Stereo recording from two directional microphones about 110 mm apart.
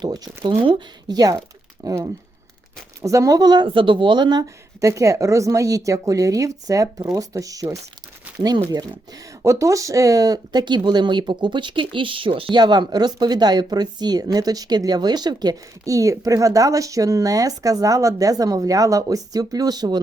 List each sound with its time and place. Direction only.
0.0 s a woman's voice: 40° right (ahead or behind)
0.5 s speech: 60° right (ahead or behind)
1.0 s a woman's voice: 35° right (ahead or behind)
9.4 s a woman's voice: 25° right (ahead or behind)